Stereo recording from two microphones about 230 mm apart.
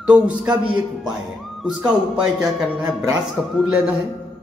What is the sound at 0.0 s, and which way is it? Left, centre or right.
Speech, centre.